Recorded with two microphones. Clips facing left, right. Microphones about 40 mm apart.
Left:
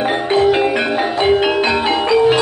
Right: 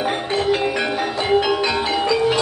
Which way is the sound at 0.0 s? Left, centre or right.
Left.